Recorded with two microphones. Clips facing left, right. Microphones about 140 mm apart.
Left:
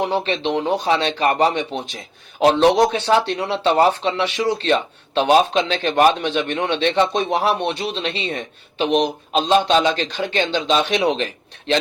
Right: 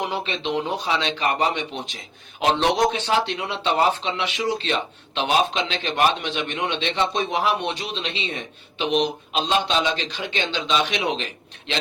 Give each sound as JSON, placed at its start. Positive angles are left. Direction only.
{"t": 0.0, "sound": "speech", "side_deg": 35}
{"t": 0.9, "sound": "speech", "side_deg": 45}